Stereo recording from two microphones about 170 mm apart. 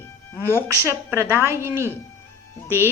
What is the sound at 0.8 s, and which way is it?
A woman's voice, 15° right (ahead or behind).